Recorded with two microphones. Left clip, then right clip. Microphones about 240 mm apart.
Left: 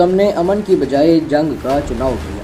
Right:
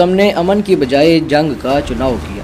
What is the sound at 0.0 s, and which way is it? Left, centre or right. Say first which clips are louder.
Speech: right 1 dB; right.